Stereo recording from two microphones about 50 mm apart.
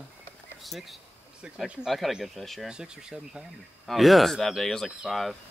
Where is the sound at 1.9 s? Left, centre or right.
Centre.